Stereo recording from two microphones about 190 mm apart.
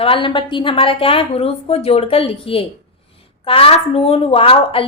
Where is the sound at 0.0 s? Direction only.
25° left (ahead or behind).